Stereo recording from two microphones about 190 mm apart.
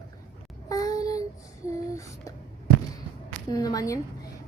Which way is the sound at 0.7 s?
20° left (ahead or behind).